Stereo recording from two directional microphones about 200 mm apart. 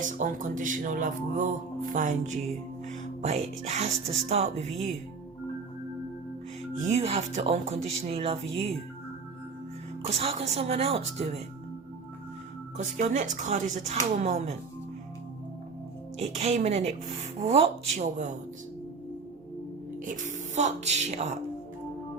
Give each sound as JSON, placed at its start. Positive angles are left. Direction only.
{"t": 0.0, "sound": "speech", "side_deg": -40}
{"t": 6.7, "sound": "speech", "side_deg": -35}
{"t": 10.1, "sound": "speech", "side_deg": -30}
{"t": 12.7, "sound": "speech", "side_deg": -40}
{"t": 16.1, "sound": "speech", "side_deg": -30}
{"t": 20.1, "sound": "speech", "side_deg": -40}